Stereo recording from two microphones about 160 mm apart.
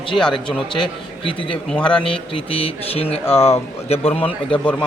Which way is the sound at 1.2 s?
35° left (ahead or behind).